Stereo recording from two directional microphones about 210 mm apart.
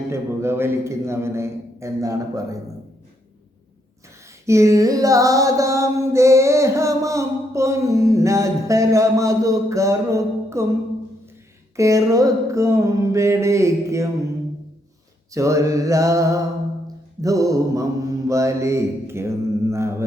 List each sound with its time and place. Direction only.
0.1 s mantra: 10° right (ahead or behind)
4.4 s mantra: 15° right (ahead or behind)
11.8 s mantra: 15° right (ahead or behind)
15.3 s mantra: 15° right (ahead or behind)